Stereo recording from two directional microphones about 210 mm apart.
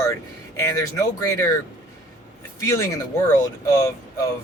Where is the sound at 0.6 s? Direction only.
15° left (ahead or behind).